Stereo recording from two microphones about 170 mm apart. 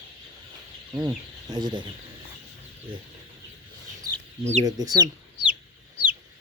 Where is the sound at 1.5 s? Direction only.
25° right (ahead or behind).